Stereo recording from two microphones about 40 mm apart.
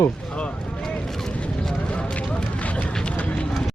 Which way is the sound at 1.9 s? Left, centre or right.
Left.